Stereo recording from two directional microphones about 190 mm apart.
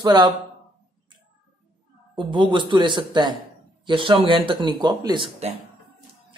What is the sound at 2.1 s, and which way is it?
Speech, 25° right (ahead or behind).